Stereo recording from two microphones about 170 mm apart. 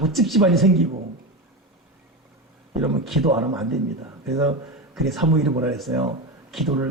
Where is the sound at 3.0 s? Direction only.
Centre (ahead or behind).